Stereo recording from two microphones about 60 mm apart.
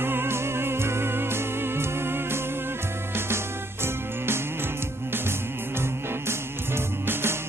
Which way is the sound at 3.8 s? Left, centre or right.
Right.